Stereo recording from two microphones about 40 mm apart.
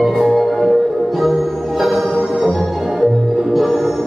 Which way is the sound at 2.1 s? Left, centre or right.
Centre.